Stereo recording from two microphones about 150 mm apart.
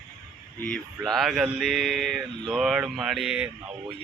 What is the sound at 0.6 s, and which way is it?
Speech, 5° left (ahead or behind).